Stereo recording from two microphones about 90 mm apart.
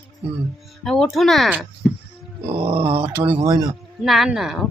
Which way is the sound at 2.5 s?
90° right.